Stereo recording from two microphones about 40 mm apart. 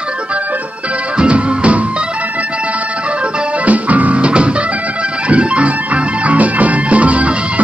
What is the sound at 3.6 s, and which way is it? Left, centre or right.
Music, right.